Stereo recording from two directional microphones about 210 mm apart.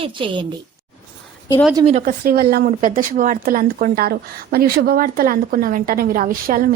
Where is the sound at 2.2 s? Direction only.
45° right (ahead or behind).